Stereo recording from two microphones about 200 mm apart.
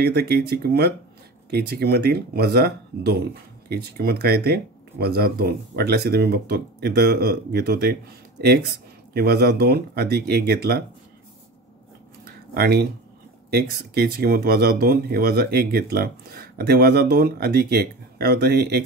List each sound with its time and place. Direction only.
0.0 s speech: 50° right (ahead or behind)
12.3 s a sound: 55° right (ahead or behind)
13.5 s speech: 50° right (ahead or behind)